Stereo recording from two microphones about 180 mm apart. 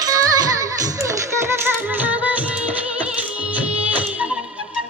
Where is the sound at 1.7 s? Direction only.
10° right (ahead or behind).